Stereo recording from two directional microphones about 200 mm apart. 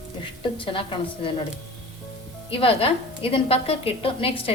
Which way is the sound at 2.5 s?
25° left (ahead or behind).